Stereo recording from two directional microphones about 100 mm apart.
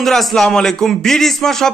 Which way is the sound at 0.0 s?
5° left (ahead or behind).